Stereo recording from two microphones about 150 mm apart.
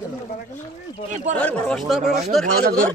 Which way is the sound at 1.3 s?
10° left (ahead or behind).